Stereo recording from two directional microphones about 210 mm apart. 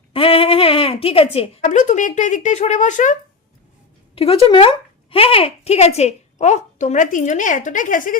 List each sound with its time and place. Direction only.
0.1 s speech: 25° left (ahead or behind)